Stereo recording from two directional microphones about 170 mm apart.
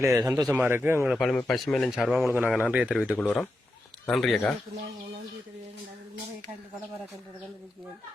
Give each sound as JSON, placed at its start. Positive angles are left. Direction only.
{"t": 0.0, "sound": "speech", "side_deg": -15}